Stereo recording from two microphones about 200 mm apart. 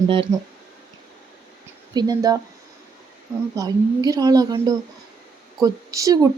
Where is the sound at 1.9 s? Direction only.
20° right (ahead or behind).